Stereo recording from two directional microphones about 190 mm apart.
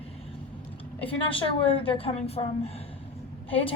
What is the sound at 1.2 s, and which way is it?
A woman's voice, 30° left (ahead or behind).